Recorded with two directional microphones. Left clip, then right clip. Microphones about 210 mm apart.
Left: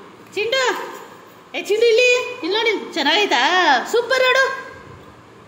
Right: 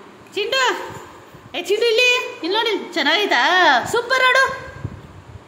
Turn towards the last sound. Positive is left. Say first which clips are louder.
# even
turn(degrees=-15)  # may be behind; listen again after turning